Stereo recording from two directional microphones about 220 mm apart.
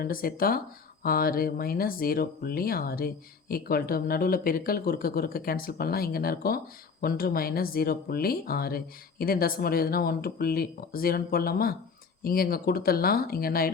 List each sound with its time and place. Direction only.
0.0 s speech: 40° left (ahead or behind)